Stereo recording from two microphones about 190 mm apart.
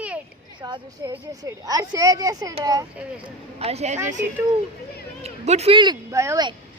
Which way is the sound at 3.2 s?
35° right (ahead or behind).